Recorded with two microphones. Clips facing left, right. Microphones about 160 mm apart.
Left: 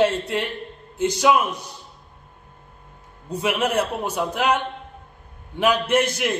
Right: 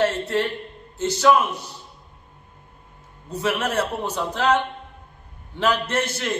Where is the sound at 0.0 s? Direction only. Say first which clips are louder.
Left 1 dB; 15° left (ahead or behind).